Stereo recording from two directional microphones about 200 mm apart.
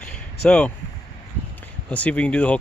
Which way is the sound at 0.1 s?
5° left (ahead or behind).